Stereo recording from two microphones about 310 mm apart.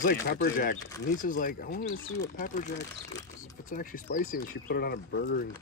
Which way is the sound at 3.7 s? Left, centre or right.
Left.